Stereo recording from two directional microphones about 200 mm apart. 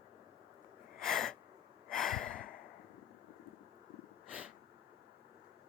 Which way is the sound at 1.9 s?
Centre (ahead or behind).